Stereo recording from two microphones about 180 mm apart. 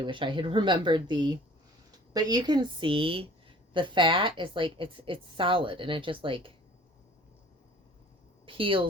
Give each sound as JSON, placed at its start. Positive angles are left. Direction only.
{"t": 0.0, "sound": "a woman's voice", "side_deg": -25}
{"t": 8.4, "sound": "a woman's voice", "side_deg": -30}